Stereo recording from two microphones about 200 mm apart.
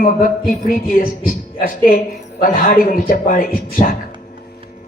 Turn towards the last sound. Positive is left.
turn(degrees=45)  # may be behind; listen again after turning